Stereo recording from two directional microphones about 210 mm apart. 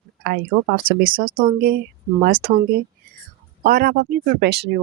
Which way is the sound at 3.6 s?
45° right (ahead or behind).